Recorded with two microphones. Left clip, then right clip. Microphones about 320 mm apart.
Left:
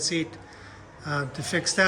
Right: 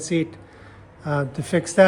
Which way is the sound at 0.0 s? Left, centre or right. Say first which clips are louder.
Right 3 dB; centre.